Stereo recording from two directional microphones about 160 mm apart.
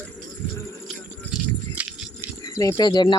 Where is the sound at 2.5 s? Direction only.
20° left (ahead or behind).